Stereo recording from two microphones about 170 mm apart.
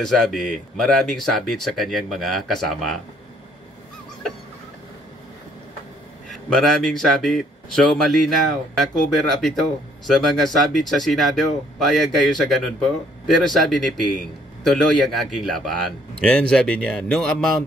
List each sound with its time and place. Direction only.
0.0 s a man's voice: centre (ahead or behind)
6.3 s a man's voice: centre (ahead or behind)